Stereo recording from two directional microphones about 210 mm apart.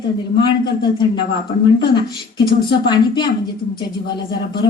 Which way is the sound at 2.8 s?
20° left (ahead or behind).